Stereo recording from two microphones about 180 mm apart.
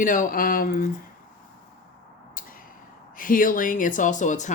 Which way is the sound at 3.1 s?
50° left (ahead or behind).